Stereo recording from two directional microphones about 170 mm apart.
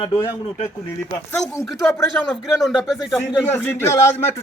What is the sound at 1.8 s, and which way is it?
Speech, 15° left (ahead or behind).